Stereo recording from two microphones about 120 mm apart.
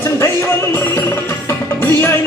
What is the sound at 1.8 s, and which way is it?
Music, 20° left (ahead or behind).